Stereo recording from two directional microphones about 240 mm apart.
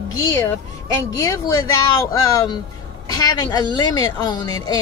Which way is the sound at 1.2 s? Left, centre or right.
Centre.